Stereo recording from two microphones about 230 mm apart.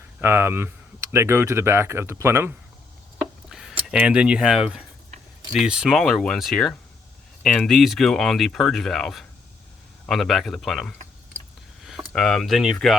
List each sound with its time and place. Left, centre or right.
0.2 s speech: centre
3.2 s a sound: centre
5.5 s speech: centre